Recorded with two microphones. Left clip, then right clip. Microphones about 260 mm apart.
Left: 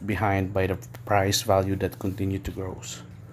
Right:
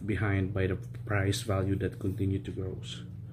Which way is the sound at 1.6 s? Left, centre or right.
Centre.